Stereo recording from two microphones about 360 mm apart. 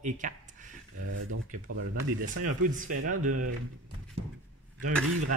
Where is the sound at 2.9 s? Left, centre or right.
Right.